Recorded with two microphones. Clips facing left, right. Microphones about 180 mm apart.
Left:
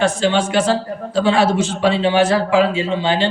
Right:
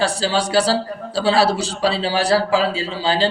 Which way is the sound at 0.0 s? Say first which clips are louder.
Left 3 dB; 35° right (ahead or behind).